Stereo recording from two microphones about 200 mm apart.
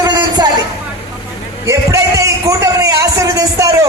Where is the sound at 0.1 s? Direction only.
20° right (ahead or behind).